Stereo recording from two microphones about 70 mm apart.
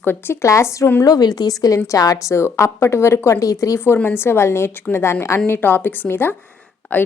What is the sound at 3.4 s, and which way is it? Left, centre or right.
Speech, left.